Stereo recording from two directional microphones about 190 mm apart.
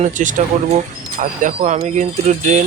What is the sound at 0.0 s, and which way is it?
Speech, 40° right (ahead or behind).